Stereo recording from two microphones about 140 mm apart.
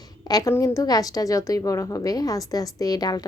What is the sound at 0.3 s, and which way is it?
A woman's voice, 25° left (ahead or behind).